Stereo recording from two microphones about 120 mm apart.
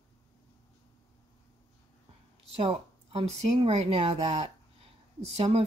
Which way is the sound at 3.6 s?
60° right (ahead or behind).